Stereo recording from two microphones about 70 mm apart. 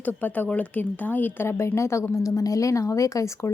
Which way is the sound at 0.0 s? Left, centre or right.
Left.